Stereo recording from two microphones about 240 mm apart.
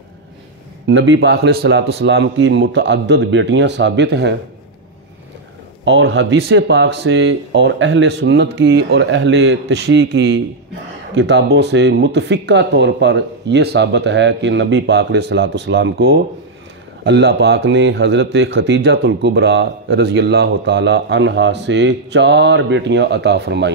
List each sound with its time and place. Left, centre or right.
0.8 s a man's voice: right
5.9 s a man's voice: right